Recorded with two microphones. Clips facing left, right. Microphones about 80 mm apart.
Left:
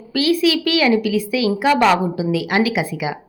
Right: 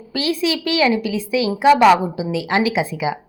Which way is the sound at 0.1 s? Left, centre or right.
Right.